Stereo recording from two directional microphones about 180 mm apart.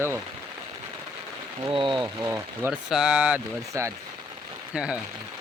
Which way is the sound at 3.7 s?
15° right (ahead or behind).